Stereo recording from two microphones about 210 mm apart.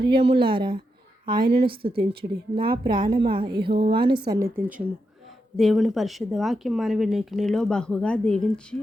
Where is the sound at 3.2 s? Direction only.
45° right (ahead or behind).